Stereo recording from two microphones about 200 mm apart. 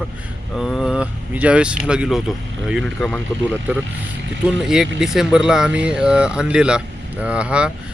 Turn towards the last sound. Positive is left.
turn(degrees=-5)  # may be behind; listen again after turning